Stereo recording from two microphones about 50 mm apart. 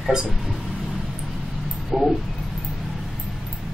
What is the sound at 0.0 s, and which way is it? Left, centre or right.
Speech, centre.